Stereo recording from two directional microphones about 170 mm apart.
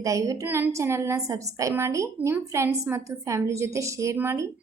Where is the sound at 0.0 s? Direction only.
20° right (ahead or behind).